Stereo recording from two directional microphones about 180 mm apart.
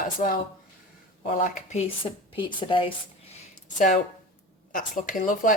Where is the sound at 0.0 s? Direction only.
50° left (ahead or behind).